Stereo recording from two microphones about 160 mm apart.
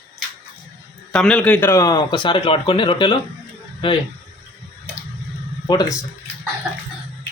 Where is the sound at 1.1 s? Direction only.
5° left (ahead or behind); by 4.0 s 30° left (ahead or behind).